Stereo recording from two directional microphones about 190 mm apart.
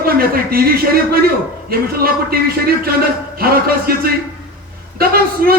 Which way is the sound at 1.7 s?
50° right (ahead or behind).